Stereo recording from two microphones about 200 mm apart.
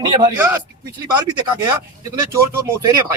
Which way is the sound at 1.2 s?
20° right (ahead or behind).